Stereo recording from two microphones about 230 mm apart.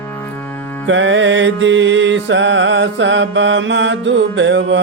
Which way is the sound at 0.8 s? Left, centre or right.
Right.